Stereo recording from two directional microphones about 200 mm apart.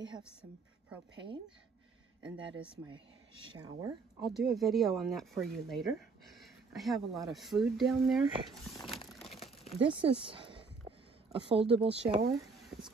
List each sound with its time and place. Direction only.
2.3 s speech: 25° right (ahead or behind)
4.3 s speech: centre (ahead or behind)
9.3 s crumpling: 30° left (ahead or behind)
9.8 s speech: 25° right (ahead or behind)
10.2 s a sound: 25° right (ahead or behind)